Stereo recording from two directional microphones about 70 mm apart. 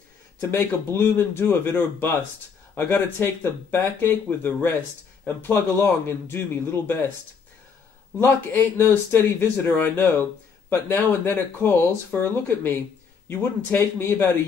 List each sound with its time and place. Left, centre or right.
0.4 s speech: left
8.2 s speech: left